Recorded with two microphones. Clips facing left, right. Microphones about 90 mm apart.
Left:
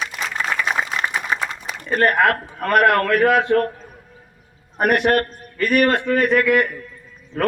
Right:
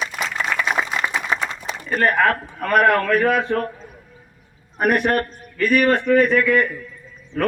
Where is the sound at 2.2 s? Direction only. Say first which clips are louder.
Left 1 dB; 65° left (ahead or behind).